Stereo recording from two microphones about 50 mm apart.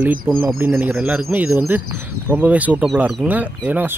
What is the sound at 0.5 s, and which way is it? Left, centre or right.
Speech, right.